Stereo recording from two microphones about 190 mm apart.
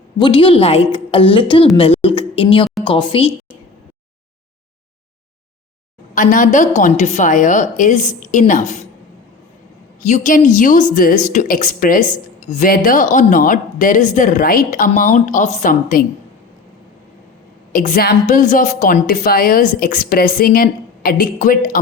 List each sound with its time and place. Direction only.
0.2 s a woman's voice: 25° left (ahead or behind)
1.7 s a sound: 30° left (ahead or behind)
2.8 s a woman's voice: 25° left (ahead or behind)
6.1 s a woman's voice: 45° left (ahead or behind)
10.0 s a woman's voice: 40° left (ahead or behind)
17.7 s a woman's voice: 45° left (ahead or behind)